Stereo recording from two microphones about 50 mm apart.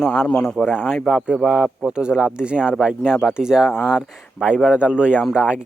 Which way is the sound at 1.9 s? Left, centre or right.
Centre.